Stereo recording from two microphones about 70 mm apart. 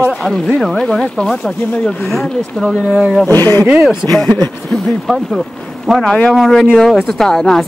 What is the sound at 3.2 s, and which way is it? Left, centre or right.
Speech, left.